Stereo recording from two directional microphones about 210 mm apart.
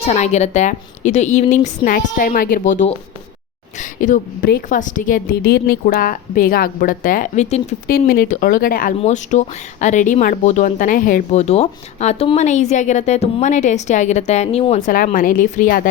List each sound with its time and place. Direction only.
0.0 s speech: 30° left (ahead or behind)
7.9 s speech: 45° left (ahead or behind)